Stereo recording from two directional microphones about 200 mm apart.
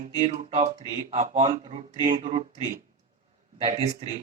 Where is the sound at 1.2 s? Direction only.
35° right (ahead or behind).